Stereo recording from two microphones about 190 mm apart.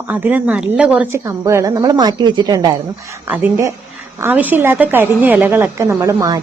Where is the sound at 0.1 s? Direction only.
10° right (ahead or behind).